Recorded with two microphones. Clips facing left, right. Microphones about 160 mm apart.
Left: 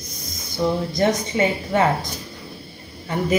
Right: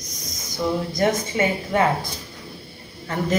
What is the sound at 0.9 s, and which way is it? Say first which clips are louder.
A woman's voice: even; 20° left (ahead or behind).